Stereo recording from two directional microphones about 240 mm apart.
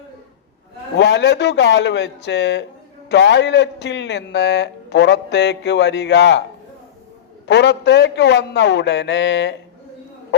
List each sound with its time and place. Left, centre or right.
0.9 s a man's voice: left
7.4 s a man's voice: left